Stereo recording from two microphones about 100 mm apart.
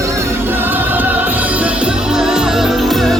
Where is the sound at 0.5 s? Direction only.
20° right (ahead or behind).